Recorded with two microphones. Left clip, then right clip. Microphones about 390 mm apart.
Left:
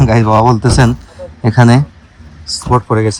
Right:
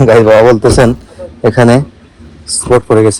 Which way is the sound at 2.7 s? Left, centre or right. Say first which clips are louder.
Right 5 dB; right.